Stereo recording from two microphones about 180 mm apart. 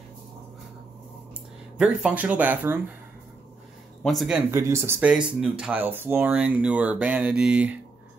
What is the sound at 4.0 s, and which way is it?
Speech, centre (ahead or behind).